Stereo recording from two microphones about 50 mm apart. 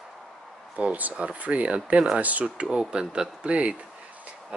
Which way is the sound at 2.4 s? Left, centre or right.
Centre.